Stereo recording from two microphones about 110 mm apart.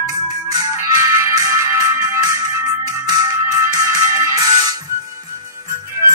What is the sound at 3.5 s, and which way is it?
Music, 25° right (ahead or behind).